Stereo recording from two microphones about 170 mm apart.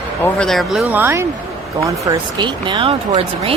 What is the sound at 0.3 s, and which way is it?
Speech, centre (ahead or behind).